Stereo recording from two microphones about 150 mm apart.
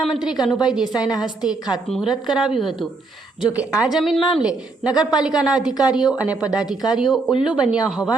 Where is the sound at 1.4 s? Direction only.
5° right (ahead or behind).